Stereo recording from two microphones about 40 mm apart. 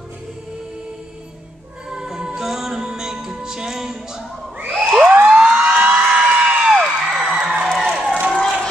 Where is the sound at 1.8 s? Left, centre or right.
Centre.